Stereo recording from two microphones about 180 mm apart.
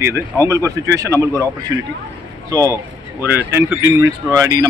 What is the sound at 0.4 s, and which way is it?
Speech, 15° right (ahead or behind).